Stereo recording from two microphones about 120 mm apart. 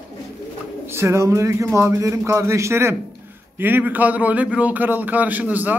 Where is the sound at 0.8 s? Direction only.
20° right (ahead or behind).